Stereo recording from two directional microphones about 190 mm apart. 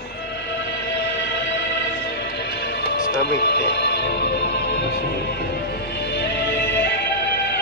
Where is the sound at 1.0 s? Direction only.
65° left (ahead or behind).